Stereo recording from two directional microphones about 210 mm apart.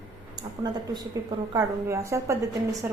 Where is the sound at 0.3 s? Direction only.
20° right (ahead or behind).